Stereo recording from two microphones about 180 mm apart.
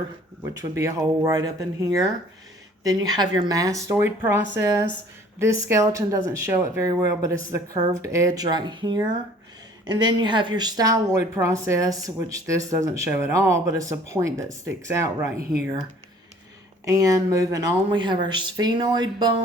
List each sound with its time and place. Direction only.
0.5 s speech: 20° right (ahead or behind)
16.8 s speech: 20° right (ahead or behind)